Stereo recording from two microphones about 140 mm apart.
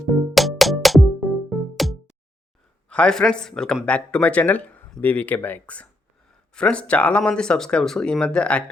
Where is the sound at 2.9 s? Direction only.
5° left (ahead or behind).